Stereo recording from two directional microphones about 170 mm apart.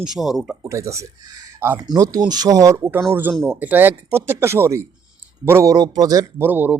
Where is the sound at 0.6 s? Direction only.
15° right (ahead or behind).